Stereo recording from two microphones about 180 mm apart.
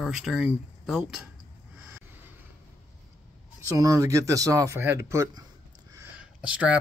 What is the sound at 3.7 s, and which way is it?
Speech, 20° right (ahead or behind).